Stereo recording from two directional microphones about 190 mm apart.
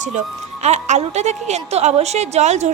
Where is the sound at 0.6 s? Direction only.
35° right (ahead or behind).